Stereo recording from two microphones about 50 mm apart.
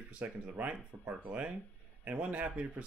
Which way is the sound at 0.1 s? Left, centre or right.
Right.